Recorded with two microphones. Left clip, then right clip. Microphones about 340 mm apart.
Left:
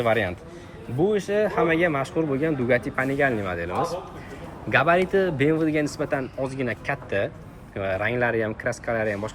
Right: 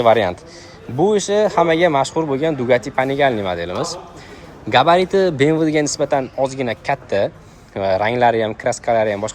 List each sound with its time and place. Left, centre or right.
0.0 s a man's voice: centre